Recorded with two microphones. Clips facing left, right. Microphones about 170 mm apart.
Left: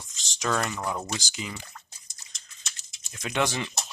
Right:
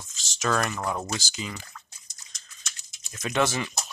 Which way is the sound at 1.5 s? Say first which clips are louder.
Right 1 dB; 20° left (ahead or behind).